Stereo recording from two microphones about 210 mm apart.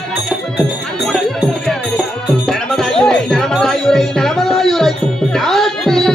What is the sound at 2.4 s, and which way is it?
Music, centre (ahead or behind).